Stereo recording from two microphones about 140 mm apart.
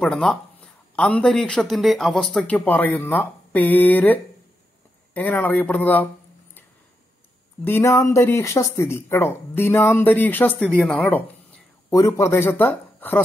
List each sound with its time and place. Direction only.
0.0 s speech: 5° left (ahead or behind)
7.6 s speech: 20° left (ahead or behind)